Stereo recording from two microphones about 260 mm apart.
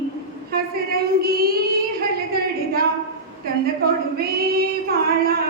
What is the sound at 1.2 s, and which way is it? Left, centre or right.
Child singing, right.